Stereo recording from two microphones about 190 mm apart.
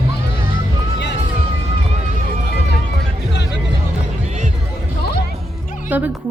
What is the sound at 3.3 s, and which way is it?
Music, 65° left (ahead or behind).